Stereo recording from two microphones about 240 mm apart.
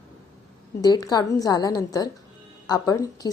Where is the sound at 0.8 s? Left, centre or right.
Centre.